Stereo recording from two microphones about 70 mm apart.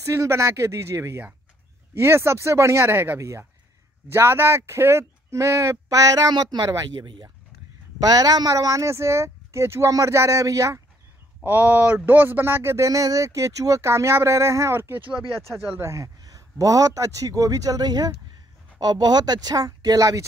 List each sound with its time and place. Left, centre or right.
0.0 s speech: right
3.2 s speech: right
8.0 s speech: right
11.4 s speech: right
15.8 s a man's voice: right